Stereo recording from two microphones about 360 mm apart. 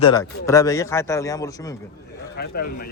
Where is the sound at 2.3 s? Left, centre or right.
Left.